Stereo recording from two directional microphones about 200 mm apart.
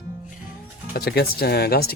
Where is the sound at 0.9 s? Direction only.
50° left (ahead or behind).